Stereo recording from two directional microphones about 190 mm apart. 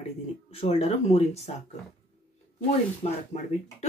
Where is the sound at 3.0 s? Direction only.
35° left (ahead or behind).